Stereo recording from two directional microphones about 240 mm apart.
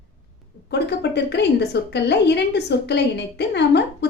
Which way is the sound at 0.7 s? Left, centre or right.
Left.